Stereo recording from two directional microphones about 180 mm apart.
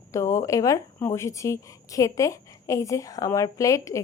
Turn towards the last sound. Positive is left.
turn(degrees=15)  # may be behind; listen again after turning